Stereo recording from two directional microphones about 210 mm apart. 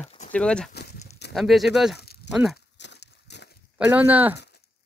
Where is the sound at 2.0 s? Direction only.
50° left (ahead or behind).